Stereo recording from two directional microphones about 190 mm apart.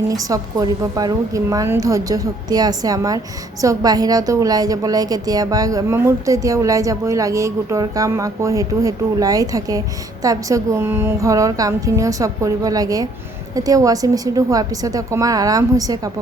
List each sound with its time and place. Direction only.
0.1 s a woman's voice: 20° right (ahead or behind)